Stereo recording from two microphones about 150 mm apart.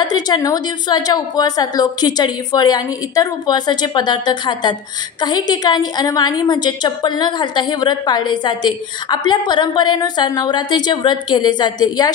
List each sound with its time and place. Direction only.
0.0 s a woman's voice: 25° left (ahead or behind)